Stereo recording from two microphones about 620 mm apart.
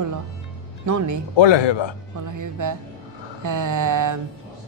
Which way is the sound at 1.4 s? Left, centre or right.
Left.